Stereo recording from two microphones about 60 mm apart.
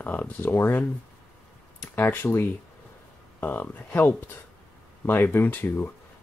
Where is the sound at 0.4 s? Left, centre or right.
Left.